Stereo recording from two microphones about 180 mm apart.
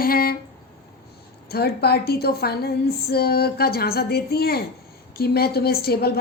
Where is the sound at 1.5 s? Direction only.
60° left (ahead or behind).